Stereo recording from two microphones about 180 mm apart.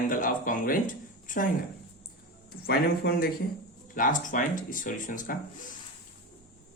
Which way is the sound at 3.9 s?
45° left (ahead or behind).